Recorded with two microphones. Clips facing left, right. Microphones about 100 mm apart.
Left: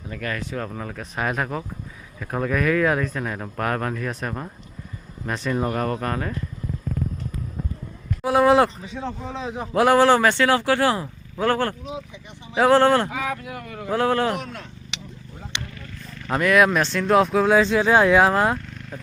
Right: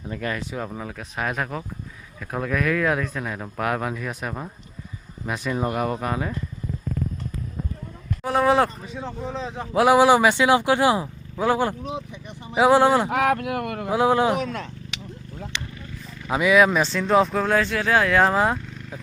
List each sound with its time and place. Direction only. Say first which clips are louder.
0.1 s speech: even; 20° right (ahead or behind)
8.2 s speech: left 3 dB; centre (ahead or behind)
13.1 s speech: right 7 dB; 65° right (ahead or behind)
13.9 s speech: right 2 dB; 15° right (ahead or behind)
16.1 s speech: even; 5° right (ahead or behind)
17.6 s speech: left 4 dB; 20° left (ahead or behind)
18.2 s speech: left 1 dB; centre (ahead or behind)